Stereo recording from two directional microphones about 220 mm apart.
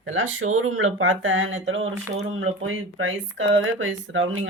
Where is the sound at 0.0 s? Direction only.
60° right (ahead or behind).